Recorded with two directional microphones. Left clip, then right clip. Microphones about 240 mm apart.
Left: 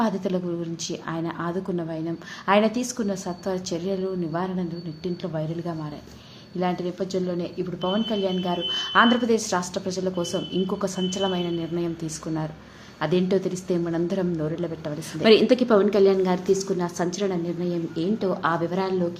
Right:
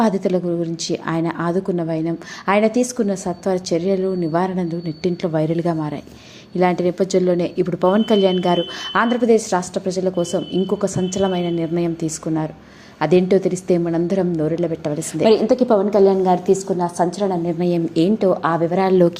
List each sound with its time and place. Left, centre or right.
0.0 s speech: right
15.2 s a woman's voice: centre
17.6 s speech: right